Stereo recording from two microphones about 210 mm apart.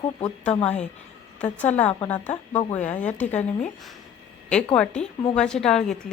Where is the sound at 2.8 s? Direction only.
35° left (ahead or behind).